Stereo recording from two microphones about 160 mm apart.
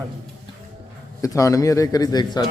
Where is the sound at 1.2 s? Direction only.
20° left (ahead or behind).